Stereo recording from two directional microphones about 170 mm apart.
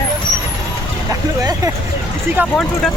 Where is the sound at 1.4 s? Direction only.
20° right (ahead or behind).